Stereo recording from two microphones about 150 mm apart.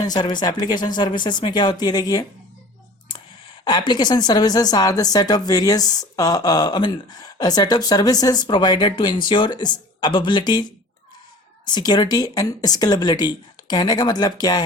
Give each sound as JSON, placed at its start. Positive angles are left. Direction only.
{"t": 0.0, "sound": "a woman's voice", "side_deg": 25}
{"t": 3.6, "sound": "a woman's voice", "side_deg": 30}